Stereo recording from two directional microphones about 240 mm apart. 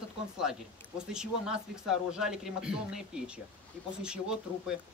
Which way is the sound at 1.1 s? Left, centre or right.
Centre.